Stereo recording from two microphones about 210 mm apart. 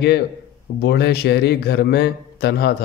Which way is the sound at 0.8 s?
50° left (ahead or behind).